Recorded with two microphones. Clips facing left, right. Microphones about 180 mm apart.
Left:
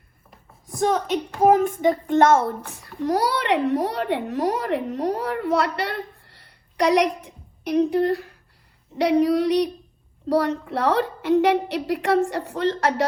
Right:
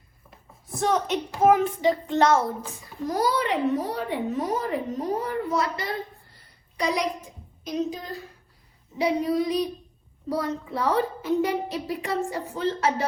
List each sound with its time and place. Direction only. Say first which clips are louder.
1.5 s a child's voice: left 2 dB; 45° left (ahead or behind); by 13.1 s 70° left (ahead or behind)